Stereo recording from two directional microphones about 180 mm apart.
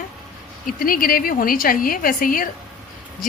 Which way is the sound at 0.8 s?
50° left (ahead or behind).